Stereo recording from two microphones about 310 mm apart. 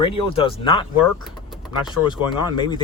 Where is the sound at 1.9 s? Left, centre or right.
Centre.